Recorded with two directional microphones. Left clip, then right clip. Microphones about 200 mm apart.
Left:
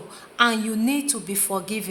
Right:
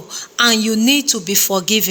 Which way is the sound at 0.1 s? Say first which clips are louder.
Right 6 dB; 35° right (ahead or behind).